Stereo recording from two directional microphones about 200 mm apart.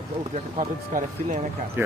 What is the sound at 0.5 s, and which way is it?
Speech, 40° right (ahead or behind).